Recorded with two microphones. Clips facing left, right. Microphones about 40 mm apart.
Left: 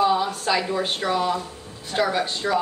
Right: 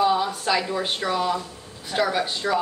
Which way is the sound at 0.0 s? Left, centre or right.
Centre.